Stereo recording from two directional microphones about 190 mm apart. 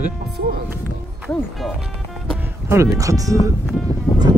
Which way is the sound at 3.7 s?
Centre (ahead or behind).